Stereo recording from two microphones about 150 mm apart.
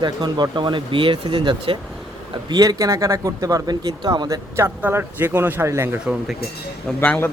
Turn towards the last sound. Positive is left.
turn(degrees=15)  # may be behind; listen again after turning